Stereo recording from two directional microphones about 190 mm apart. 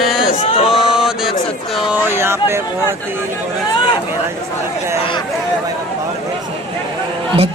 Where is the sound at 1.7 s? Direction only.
10° right (ahead or behind).